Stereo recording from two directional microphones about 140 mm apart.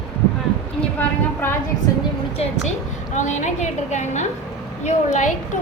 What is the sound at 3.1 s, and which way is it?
A woman's voice, 60° left (ahead or behind).